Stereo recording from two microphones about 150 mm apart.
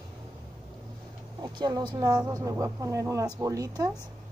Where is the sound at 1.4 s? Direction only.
25° right (ahead or behind).